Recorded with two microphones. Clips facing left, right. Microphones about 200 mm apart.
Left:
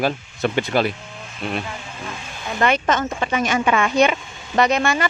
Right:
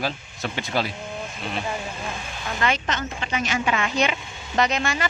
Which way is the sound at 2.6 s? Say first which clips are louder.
Left 7 dB; 50° left (ahead or behind).